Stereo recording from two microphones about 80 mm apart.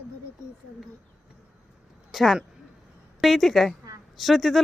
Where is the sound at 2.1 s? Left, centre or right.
Centre.